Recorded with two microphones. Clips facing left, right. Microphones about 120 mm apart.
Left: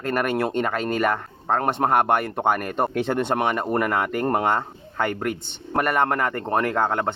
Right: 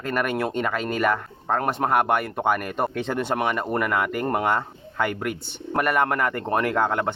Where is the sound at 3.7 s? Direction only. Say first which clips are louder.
Left 1 dB; 40° left (ahead or behind).